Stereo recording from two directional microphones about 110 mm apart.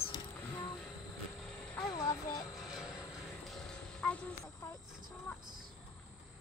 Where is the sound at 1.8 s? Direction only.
35° left (ahead or behind).